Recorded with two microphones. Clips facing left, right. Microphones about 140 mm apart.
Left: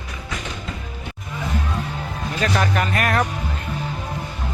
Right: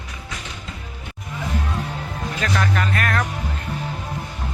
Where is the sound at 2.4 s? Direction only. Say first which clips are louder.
Left 2 dB; 15° left (ahead or behind).